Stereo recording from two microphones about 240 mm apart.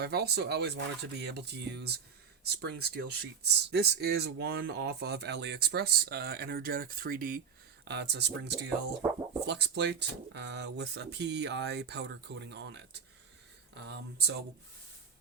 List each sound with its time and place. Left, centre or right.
0.0 s speech: right